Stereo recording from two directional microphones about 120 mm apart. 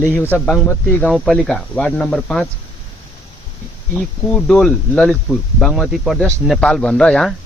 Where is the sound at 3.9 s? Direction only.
5° left (ahead or behind).